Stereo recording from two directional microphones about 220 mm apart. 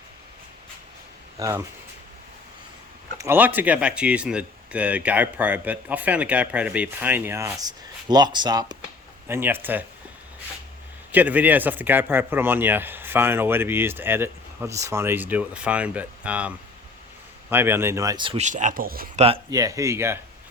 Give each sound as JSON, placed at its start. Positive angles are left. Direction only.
{"t": 1.4, "sound": "speech", "side_deg": -15}
{"t": 3.2, "sound": "speech", "side_deg": -10}
{"t": 11.1, "sound": "speech", "side_deg": -5}
{"t": 17.5, "sound": "speech", "side_deg": -10}
{"t": 19.2, "sound": "speech", "side_deg": -20}